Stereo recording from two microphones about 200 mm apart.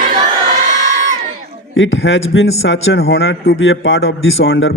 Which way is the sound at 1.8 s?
65° left (ahead or behind).